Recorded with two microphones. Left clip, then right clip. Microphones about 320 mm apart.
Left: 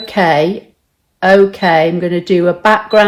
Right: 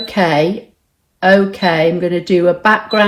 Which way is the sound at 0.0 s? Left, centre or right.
Left.